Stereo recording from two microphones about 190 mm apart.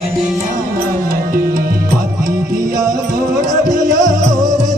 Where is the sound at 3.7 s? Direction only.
40° right (ahead or behind).